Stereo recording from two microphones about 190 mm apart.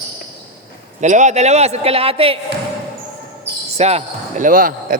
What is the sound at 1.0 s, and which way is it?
A man's voice, 40° right (ahead or behind).